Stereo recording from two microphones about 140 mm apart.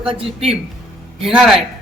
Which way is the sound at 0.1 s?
45° right (ahead or behind).